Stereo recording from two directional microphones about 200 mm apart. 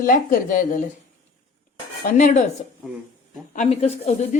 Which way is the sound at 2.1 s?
40° left (ahead or behind).